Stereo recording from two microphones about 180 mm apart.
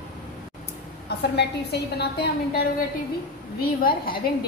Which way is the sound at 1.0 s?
65° left (ahead or behind).